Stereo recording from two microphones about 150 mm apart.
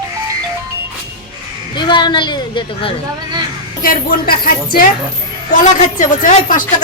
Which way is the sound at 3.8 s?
70° left (ahead or behind).